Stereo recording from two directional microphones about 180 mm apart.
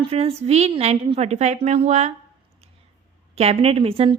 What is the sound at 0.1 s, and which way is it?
A woman's voice, 35° right (ahead or behind).